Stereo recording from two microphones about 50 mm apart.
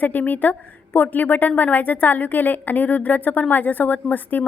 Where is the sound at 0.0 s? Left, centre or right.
Left.